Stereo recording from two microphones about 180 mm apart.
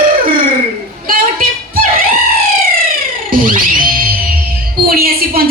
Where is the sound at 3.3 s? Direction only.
50° right (ahead or behind).